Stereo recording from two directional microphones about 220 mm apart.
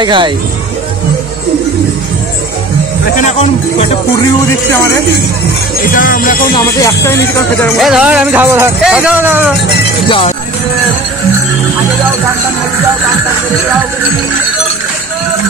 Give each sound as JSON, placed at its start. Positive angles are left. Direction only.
{"t": 0.0, "sound": "speech", "side_deg": -20}
{"t": 3.2, "sound": "speech", "side_deg": 30}
{"t": 4.5, "sound": "speech", "side_deg": 10}
{"t": 5.9, "sound": "speech", "side_deg": 40}
{"t": 6.5, "sound": "speech", "side_deg": 15}
{"t": 7.8, "sound": "speech", "side_deg": 0}
{"t": 10.0, "sound": "speech", "side_deg": 25}